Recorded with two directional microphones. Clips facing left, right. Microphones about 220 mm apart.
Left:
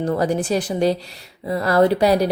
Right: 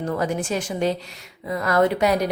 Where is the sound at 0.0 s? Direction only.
35° left (ahead or behind).